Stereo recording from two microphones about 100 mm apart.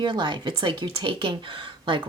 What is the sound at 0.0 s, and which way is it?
A woman's voice, 50° right (ahead or behind).